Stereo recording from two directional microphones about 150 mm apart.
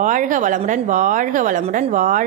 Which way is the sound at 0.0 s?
60° right (ahead or behind).